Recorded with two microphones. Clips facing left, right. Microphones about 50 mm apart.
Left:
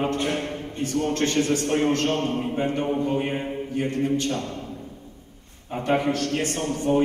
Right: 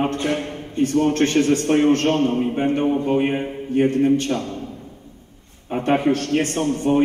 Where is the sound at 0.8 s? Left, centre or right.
Right.